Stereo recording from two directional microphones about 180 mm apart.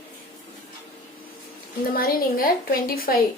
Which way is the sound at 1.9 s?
55° left (ahead or behind).